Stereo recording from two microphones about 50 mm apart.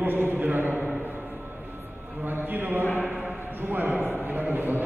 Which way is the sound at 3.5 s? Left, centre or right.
Right.